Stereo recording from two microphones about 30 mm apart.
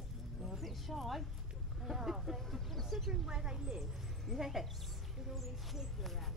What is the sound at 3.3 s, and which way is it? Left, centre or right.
Speech, right.